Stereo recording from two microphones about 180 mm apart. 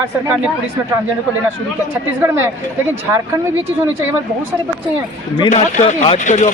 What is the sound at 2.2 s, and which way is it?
Speech, 15° right (ahead or behind).